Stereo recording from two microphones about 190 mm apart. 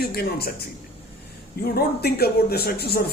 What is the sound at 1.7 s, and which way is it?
Speech, 55° left (ahead or behind).